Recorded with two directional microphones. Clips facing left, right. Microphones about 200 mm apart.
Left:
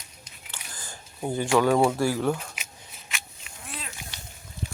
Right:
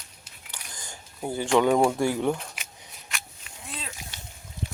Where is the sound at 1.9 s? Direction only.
20° right (ahead or behind).